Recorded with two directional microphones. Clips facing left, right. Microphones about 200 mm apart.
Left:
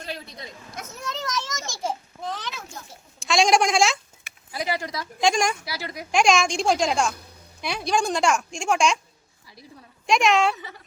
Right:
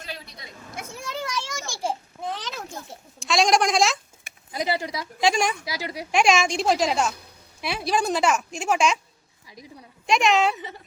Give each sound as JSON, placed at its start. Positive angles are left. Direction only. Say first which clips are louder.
{"t": 0.9, "sound": "children playing", "louder": "left 1 dB", "side_deg": -10}
{"t": 1.8, "sound": "babbling", "louder": "right 1 dB", "side_deg": -15}
{"t": 3.2, "sound": "speech", "louder": "left 1 dB", "side_deg": 0}
{"t": 4.5, "sound": "speech", "louder": "right 2 dB", "side_deg": -20}
{"t": 5.2, "sound": "a woman's voice", "louder": "even", "side_deg": -5}
{"t": 5.6, "sound": "speech", "louder": "right 2 dB", "side_deg": -15}
{"t": 6.1, "sound": "a woman's voice", "louder": "even", "side_deg": -5}
{"t": 10.1, "sound": "a woman's voice", "louder": "even", "side_deg": 0}
{"t": 10.5, "sound": "speech", "louder": "right 1 dB", "side_deg": -20}